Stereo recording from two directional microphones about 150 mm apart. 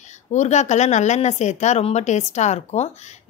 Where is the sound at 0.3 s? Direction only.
50° left (ahead or behind).